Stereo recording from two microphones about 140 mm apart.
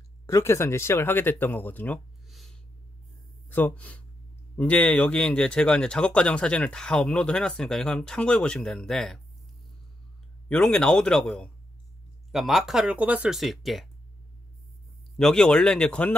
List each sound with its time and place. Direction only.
0.3 s speech: 20° left (ahead or behind)
2.2 s a sound: centre (ahead or behind)
3.4 s speech: 15° left (ahead or behind)
10.5 s speech: 5° left (ahead or behind)
15.1 s speech: 5° left (ahead or behind)